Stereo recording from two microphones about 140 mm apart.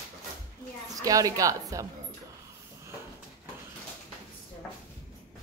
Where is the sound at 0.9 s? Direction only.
25° right (ahead or behind).